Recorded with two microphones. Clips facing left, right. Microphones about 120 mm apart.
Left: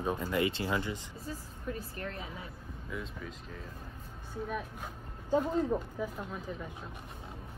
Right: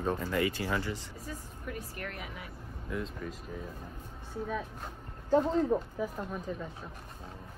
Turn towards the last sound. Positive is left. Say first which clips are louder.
# right 3 dB
turn(degrees=5)  # may be behind; listen again after turning